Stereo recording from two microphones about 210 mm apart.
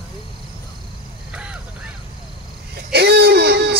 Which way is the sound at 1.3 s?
5° right (ahead or behind).